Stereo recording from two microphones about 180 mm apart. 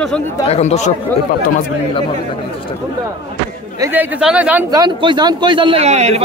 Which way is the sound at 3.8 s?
10° right (ahead or behind).